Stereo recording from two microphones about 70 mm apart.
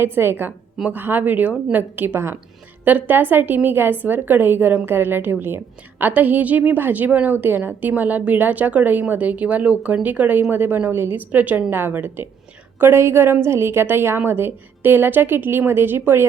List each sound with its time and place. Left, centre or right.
0.0 s a woman's voice: right